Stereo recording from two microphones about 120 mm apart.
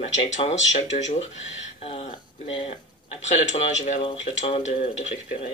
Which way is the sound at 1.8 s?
50° left (ahead or behind).